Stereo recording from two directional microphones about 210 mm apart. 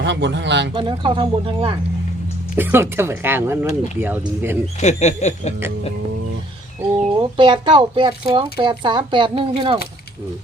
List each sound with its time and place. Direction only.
0.0 s speech: 55° right (ahead or behind)
0.7 s speech: 25° right (ahead or behind)
2.6 s speech: 10° right (ahead or behind)
4.8 s a sound: 35° left (ahead or behind)
7.2 s speech: 20° right (ahead or behind)